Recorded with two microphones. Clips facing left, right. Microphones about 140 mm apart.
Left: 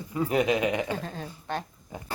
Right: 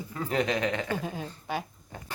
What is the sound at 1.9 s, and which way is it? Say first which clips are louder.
Speech: left 4 dB; 10° left (ahead or behind).